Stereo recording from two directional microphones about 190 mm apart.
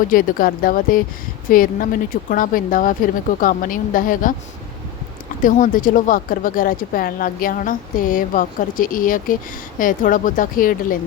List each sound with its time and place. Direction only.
0.1 s speech: 50° left (ahead or behind)
5.4 s speech: 45° left (ahead or behind)